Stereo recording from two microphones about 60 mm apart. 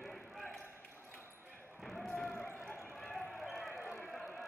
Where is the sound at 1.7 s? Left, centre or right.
Centre.